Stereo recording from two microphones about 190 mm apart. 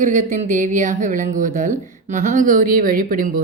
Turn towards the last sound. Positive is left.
turn(degrees=-45)  # may be behind; listen again after turning